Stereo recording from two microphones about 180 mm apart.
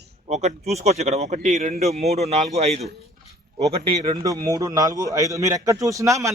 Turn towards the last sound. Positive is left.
turn(degrees=-15)  # may be behind; listen again after turning